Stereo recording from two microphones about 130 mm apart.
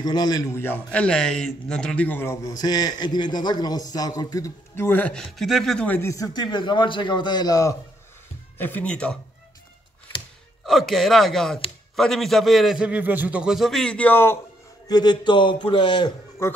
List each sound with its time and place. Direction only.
0.0 s a man's voice: 30° left (ahead or behind)
0.6 s a man's voice: 15° left (ahead or behind)
4.7 s a man's voice: 15° left (ahead or behind)
5.9 s a man's voice: 25° left (ahead or behind)
8.5 s a man's voice: 15° left (ahead or behind)
10.6 s a man's voice: centre (ahead or behind); by 14.4 s 15° left (ahead or behind)
14.9 s a man's voice: 30° left (ahead or behind)